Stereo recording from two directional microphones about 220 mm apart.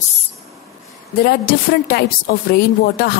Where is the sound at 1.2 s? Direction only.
45° left (ahead or behind).